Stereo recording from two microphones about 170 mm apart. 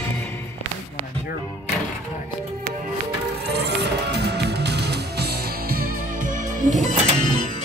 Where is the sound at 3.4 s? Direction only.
75° right (ahead or behind); by 6.8 s 55° right (ahead or behind).